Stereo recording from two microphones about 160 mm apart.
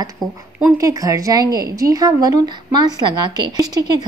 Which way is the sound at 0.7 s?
20° right (ahead or behind).